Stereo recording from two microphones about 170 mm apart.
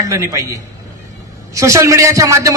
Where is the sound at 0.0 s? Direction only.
20° right (ahead or behind).